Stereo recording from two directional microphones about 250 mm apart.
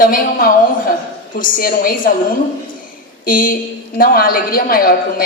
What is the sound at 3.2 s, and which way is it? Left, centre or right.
A woman's voice, left.